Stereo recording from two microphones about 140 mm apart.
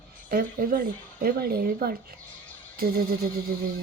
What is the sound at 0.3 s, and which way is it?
Speech, 85° right.